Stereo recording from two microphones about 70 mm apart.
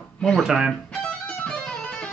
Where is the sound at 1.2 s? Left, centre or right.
Left.